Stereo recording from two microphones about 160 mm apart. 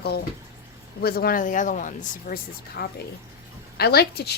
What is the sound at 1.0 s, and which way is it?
Speech, 75° left (ahead or behind).